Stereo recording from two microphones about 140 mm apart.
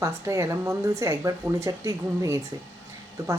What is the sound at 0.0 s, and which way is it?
A woman's voice, 20° right (ahead or behind).